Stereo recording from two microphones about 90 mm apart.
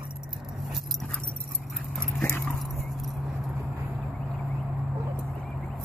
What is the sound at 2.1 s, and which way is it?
Dog, 20° left (ahead or behind).